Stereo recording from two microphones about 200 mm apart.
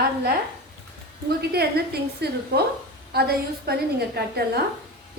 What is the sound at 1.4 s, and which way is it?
A woman's voice, 55° right (ahead or behind).